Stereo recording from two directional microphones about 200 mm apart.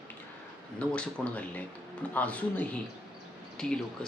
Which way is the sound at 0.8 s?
5° left (ahead or behind).